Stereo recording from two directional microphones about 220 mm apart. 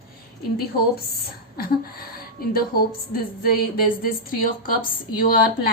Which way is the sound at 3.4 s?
40° left (ahead or behind).